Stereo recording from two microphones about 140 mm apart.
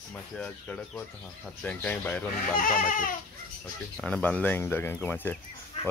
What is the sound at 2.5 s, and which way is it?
Speech, 80° left.